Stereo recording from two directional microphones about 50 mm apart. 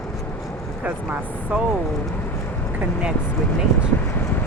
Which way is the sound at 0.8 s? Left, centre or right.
Right.